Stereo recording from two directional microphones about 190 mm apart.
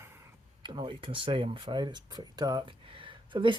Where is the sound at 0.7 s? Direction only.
25° right (ahead or behind).